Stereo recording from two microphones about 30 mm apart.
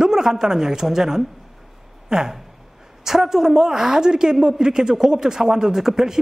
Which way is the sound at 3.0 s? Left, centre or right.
Centre.